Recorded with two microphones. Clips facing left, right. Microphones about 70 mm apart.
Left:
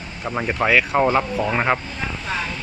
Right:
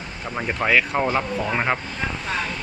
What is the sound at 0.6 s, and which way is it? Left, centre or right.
Speech, centre.